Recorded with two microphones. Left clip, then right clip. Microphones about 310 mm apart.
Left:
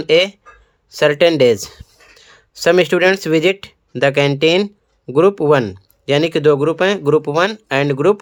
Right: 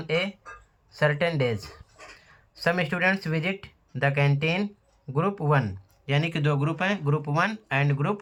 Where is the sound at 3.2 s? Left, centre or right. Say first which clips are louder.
Left 15 dB; left.